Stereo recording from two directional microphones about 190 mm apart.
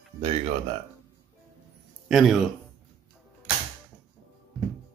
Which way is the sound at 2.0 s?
Centre (ahead or behind).